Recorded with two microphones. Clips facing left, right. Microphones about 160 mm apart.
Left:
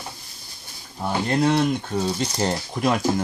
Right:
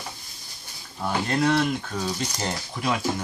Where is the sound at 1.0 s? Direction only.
20° left (ahead or behind).